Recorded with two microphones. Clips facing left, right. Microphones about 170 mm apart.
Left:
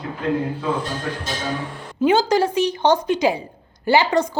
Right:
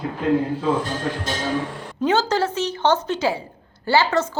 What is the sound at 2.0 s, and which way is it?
A woman's voice, 10° left (ahead or behind).